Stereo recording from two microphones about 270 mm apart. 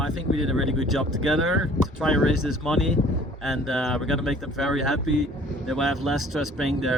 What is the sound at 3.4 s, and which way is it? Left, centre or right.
Speech, centre.